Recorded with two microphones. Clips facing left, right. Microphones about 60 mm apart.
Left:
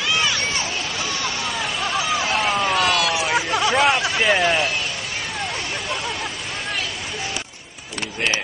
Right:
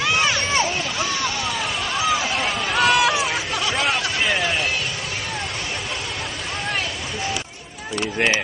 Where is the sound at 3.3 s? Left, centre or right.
Centre.